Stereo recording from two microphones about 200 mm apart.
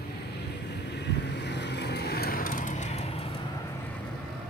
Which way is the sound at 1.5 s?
60° left (ahead or behind).